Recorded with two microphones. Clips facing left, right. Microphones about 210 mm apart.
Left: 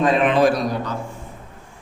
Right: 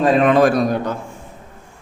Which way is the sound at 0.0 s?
40° right (ahead or behind).